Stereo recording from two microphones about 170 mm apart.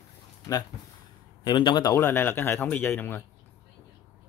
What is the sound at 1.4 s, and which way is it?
A man's voice, 25° left (ahead or behind).